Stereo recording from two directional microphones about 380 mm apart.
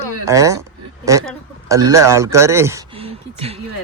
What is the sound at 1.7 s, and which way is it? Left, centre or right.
A man's voice, centre.